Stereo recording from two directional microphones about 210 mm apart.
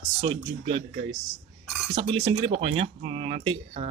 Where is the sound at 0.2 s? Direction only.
25° right (ahead or behind).